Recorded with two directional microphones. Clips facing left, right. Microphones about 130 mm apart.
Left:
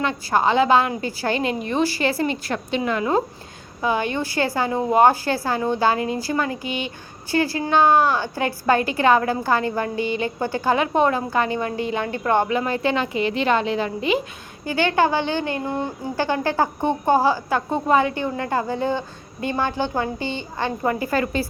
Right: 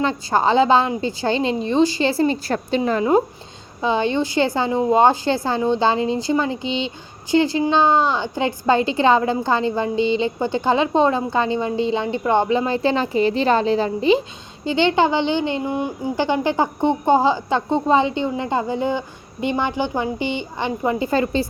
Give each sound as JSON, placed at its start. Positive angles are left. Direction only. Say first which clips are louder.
{"t": 0.0, "sound": "a woman's voice", "louder": "right 2 dB", "side_deg": -30}